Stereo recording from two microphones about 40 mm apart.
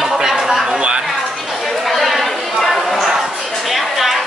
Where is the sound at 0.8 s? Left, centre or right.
Right.